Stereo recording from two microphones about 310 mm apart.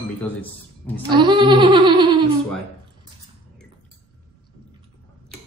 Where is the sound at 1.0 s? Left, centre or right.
Centre.